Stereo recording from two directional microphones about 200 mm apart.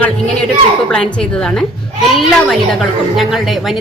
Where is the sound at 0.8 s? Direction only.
5° left (ahead or behind).